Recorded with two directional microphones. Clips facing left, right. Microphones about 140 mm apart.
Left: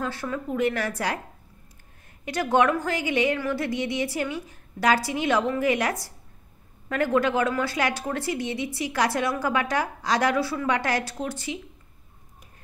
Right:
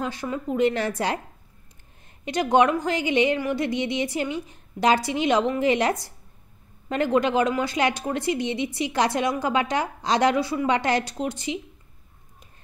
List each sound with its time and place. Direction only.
0.0 s a woman's voice: 20° right (ahead or behind)
2.2 s a woman's voice: 20° right (ahead or behind)